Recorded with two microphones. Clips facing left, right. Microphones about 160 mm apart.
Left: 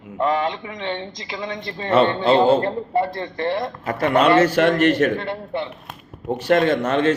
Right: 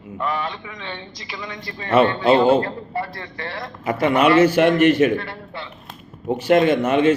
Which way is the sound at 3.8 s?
15° right (ahead or behind).